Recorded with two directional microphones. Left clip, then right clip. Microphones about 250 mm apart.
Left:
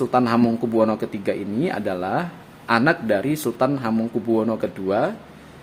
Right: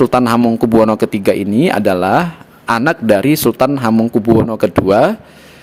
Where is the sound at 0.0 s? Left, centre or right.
Right.